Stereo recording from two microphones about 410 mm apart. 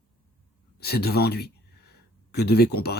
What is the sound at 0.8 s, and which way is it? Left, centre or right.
Speech, left.